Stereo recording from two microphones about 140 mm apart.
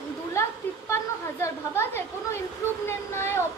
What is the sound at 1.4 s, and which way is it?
Speech, 20° left (ahead or behind).